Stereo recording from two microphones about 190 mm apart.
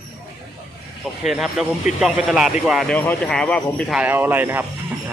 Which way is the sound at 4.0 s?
10° right (ahead or behind).